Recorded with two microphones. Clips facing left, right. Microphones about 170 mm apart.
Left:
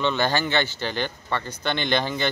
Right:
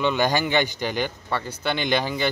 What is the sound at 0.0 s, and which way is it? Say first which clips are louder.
Speech: right 1 dB; 10° right (ahead or behind).